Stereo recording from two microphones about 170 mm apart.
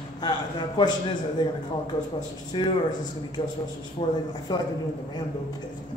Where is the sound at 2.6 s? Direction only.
30° left (ahead or behind).